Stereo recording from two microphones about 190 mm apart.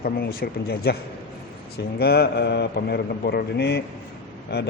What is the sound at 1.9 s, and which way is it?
Speech, 55° left (ahead or behind).